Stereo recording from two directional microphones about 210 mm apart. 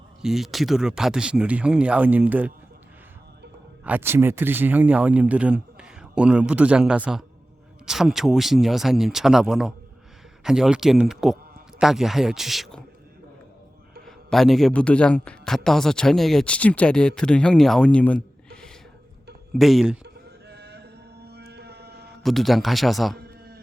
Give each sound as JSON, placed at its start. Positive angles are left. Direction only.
{"t": 0.2, "sound": "a man's voice", "side_deg": 0}
{"t": 3.8, "sound": "a man's voice", "side_deg": -10}
{"t": 14.0, "sound": "a man's voice", "side_deg": 0}
{"t": 19.5, "sound": "a man's voice", "side_deg": 0}
{"t": 20.5, "sound": "a sound", "side_deg": -50}
{"t": 22.2, "sound": "a man's voice", "side_deg": 0}